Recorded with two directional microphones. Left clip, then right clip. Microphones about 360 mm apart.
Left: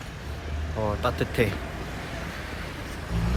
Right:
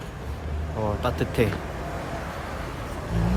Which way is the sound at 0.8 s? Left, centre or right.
Centre.